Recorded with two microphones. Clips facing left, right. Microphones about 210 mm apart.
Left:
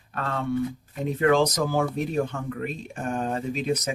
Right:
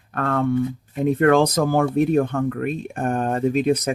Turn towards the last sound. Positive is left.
turn(degrees=-55)  # may be behind; listen again after turning